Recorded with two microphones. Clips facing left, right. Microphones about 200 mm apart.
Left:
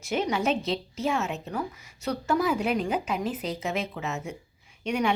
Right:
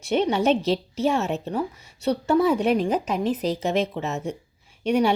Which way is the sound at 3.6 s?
40° right (ahead or behind).